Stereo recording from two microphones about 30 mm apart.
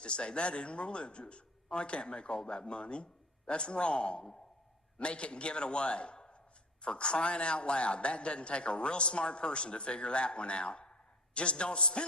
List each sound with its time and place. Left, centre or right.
0.0 s a man's voice: left